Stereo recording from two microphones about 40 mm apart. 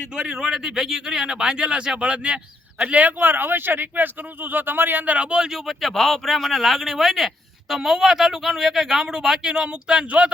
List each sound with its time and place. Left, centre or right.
0.2 s speech: right
0.5 s speech: centre; by 2.4 s right
2.8 s speech: right
5.1 s speech: right
5.6 s speech: centre
10.1 s speech: right